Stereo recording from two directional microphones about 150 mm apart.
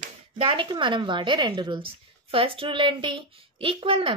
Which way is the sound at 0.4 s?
35° right (ahead or behind).